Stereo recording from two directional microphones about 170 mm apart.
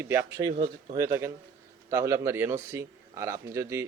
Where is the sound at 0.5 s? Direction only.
35° right (ahead or behind).